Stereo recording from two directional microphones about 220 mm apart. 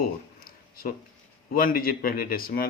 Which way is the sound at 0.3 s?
40° left (ahead or behind).